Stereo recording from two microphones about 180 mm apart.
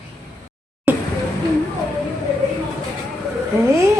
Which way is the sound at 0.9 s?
10° right (ahead or behind).